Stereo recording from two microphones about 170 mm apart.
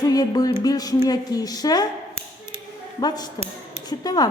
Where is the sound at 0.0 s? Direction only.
20° left (ahead or behind).